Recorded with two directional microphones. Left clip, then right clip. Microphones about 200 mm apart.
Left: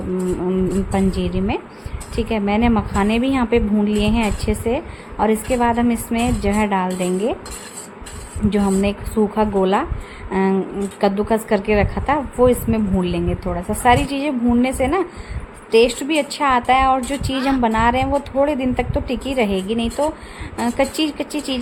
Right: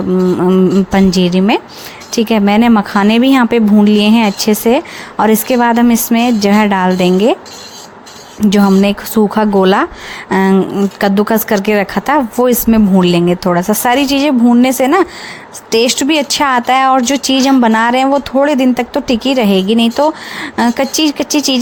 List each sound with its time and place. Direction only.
0.3 s speech: 25° right (ahead or behind)
8.4 s speech: 25° right (ahead or behind)